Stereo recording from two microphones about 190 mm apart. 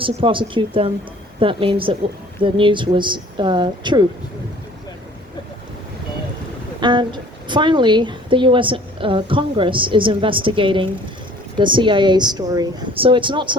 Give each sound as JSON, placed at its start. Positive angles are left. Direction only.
{"t": 0.0, "sound": "a woman's voice", "side_deg": -25}
{"t": 6.7, "sound": "a woman's voice", "side_deg": -25}